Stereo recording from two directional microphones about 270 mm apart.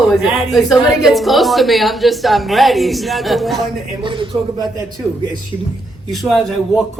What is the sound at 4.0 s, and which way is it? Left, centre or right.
Speech, centre.